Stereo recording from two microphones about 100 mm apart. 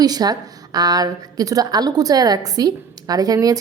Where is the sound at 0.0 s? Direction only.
40° right (ahead or behind).